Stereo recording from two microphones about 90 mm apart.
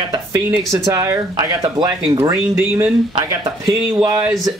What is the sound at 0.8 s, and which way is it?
Speech, 35° right (ahead or behind).